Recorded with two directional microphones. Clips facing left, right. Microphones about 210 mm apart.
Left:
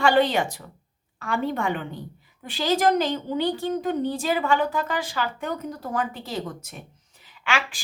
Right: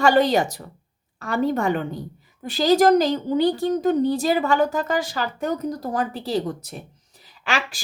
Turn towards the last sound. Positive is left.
turn(degrees=-35)  # may be behind; listen again after turning